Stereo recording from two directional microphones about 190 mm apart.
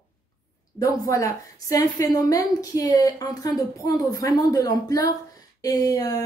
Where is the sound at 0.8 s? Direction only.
15° left (ahead or behind).